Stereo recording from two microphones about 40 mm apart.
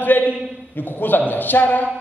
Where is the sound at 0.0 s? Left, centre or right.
Left.